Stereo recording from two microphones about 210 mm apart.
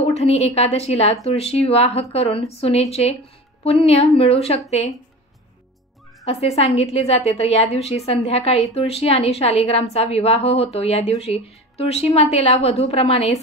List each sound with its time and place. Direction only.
0.0 s a woman's voice: 30° left (ahead or behind)
6.2 s a woman's voice: 30° left (ahead or behind)